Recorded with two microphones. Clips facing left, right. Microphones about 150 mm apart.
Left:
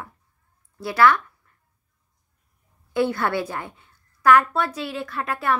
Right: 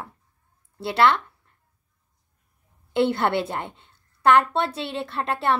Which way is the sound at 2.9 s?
25° right (ahead or behind).